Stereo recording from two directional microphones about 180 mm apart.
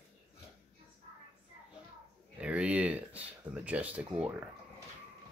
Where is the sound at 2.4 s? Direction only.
5° right (ahead or behind).